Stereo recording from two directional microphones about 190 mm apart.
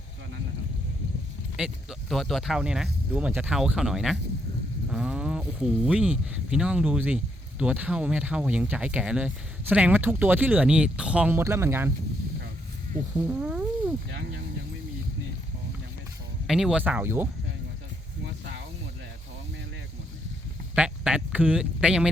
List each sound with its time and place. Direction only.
1.5 s speech: centre (ahead or behind)
13.1 s a sound: 10° right (ahead or behind)
16.5 s speech: centre (ahead or behind)
20.7 s speech: 5° right (ahead or behind)